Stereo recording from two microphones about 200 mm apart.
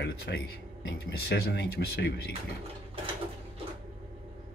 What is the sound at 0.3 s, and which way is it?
Speech, 55° left (ahead or behind).